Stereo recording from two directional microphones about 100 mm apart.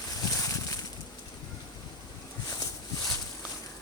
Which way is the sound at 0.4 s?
35° left (ahead or behind).